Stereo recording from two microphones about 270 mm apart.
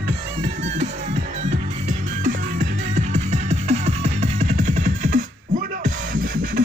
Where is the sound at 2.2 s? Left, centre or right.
Right.